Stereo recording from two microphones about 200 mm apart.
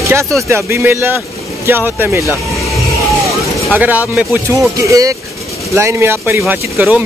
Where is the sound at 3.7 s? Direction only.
10° right (ahead or behind).